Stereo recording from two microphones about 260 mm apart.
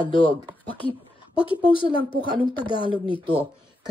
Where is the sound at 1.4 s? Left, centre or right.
Centre.